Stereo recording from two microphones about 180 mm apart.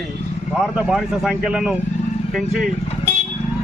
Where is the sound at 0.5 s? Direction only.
Centre (ahead or behind).